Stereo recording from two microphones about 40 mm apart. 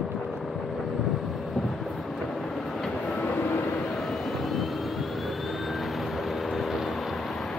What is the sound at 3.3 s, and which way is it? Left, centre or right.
Vehicle, left.